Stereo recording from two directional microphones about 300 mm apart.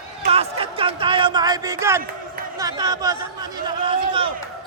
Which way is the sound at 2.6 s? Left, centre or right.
Centre.